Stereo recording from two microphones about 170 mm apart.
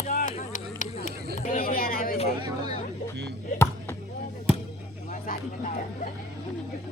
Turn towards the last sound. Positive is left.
turn(degrees=55)  # may be behind; listen again after turning